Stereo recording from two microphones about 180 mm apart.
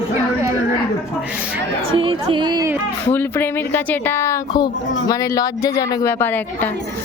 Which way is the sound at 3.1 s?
10° left (ahead or behind).